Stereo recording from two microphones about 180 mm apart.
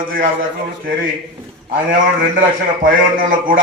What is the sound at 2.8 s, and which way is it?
Speech, 50° right (ahead or behind).